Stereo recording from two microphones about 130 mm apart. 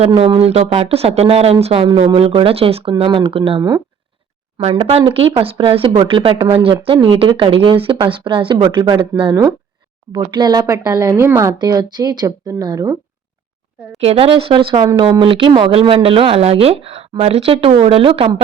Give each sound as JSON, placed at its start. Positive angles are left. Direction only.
{"t": 0.2, "sound": "speech", "side_deg": -50}
{"t": 3.0, "sound": "a woman's voice", "side_deg": -35}
{"t": 11.5, "sound": "a woman's voice", "side_deg": -30}
{"t": 14.0, "sound": "speech", "side_deg": -50}